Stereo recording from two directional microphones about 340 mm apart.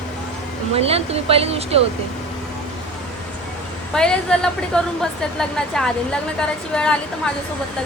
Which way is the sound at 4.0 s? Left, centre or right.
Centre.